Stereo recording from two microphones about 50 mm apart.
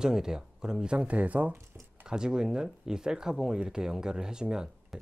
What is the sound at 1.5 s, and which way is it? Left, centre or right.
Speech, right.